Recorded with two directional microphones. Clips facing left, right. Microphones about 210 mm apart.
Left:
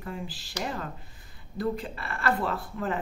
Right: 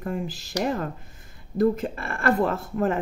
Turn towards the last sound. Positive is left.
turn(degrees=-45)  # may be behind; listen again after turning